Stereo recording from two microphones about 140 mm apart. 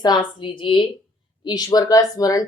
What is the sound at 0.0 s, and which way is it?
Speech, 30° left (ahead or behind).